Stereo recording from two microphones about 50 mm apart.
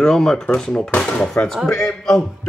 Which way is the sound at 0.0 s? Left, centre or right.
Centre.